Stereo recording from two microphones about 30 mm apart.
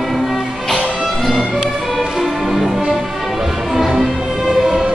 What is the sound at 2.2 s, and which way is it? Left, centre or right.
Music, centre.